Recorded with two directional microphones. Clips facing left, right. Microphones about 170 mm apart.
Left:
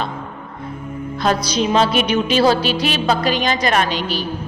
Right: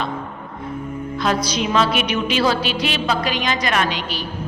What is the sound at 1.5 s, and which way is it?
Music, 35° left (ahead or behind).